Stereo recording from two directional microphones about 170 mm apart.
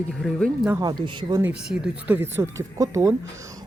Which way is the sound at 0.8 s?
25° right (ahead or behind).